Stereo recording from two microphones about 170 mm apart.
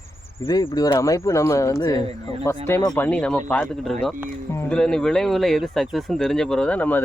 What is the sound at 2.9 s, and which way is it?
Speech, 10° left (ahead or behind).